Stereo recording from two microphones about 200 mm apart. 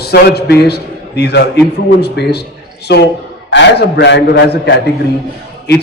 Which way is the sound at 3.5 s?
60° left (ahead or behind).